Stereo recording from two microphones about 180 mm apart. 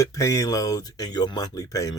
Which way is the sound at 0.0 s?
20° left (ahead or behind).